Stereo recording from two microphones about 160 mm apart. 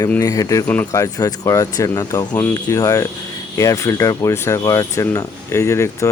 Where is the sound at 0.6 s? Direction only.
10° left (ahead or behind).